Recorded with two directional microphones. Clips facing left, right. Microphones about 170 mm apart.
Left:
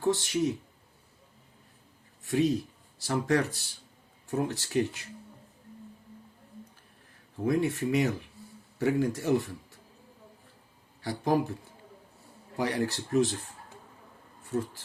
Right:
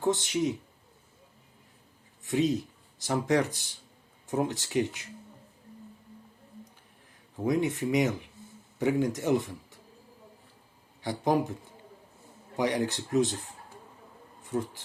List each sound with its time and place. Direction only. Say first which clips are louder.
0.0 s speech: even; 20° right (ahead or behind)
2.2 s speech: even; 20° right (ahead or behind)
7.4 s speech: even; 20° right (ahead or behind)
11.0 s speech: right 1 dB; 20° right (ahead or behind)
12.5 s speech: right 1 dB; 20° right (ahead or behind)
14.4 s a sound: even; 15° right (ahead or behind)